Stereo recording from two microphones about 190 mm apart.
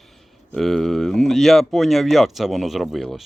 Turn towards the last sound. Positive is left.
turn(degrees=0)  # may be behind; listen again after turning